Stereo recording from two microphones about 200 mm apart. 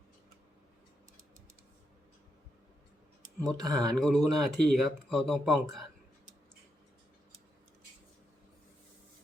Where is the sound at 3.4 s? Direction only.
20° right (ahead or behind).